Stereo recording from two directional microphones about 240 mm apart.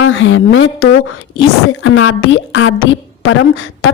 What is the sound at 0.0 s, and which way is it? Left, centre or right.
Speech, left.